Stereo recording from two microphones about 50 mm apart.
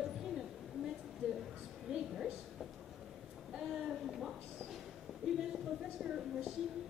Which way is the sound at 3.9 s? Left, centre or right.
Centre.